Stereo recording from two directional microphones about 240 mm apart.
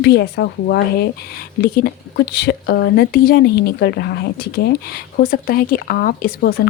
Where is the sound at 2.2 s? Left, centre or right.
Left.